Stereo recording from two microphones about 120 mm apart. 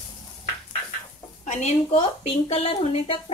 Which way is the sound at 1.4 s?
85° left.